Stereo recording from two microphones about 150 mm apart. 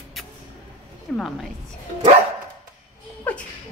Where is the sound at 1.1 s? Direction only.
Centre (ahead or behind).